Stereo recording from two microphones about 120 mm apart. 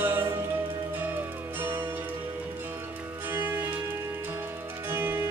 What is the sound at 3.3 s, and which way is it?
Music, 15° right (ahead or behind).